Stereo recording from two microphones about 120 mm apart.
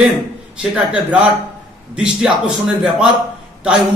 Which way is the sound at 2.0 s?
10° right (ahead or behind).